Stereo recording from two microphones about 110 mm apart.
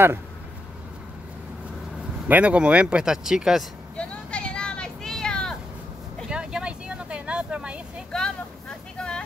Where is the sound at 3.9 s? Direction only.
10° left (ahead or behind).